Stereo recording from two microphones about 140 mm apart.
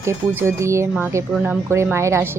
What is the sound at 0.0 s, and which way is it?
A woman's voice, 20° right (ahead or behind).